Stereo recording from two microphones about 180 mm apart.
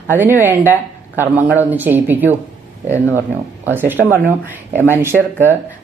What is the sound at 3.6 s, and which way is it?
Speech, 10° right (ahead or behind).